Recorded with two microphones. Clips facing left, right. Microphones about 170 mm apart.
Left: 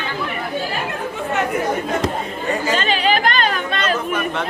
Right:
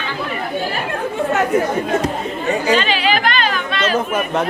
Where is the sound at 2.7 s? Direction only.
45° left (ahead or behind).